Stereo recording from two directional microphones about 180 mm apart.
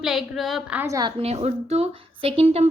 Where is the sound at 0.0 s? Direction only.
Centre (ahead or behind).